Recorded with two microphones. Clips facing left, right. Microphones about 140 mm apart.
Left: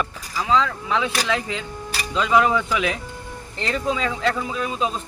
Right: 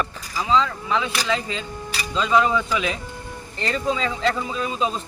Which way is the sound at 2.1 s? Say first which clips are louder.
Left 1 dB; 10° left (ahead or behind).